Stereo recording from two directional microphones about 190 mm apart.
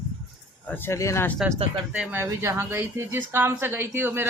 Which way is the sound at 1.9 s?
5° right (ahead or behind).